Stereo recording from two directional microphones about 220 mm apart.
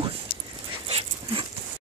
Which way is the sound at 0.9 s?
25° right (ahead or behind).